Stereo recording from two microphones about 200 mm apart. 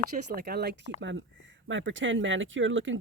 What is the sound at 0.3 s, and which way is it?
Speech, 50° right (ahead or behind).